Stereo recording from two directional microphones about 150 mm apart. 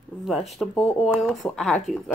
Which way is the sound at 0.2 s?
Centre (ahead or behind).